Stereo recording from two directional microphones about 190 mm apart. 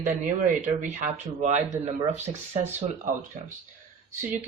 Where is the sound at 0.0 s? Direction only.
45° right (ahead or behind).